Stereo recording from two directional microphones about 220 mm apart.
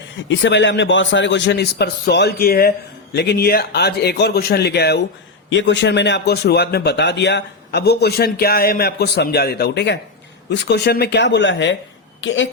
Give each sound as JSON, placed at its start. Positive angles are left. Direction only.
{"t": 0.2, "sound": "a man's voice", "side_deg": 55}